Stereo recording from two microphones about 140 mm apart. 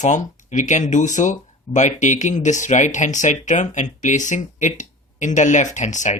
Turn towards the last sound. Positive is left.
turn(degrees=60)  # may be behind; listen again after turning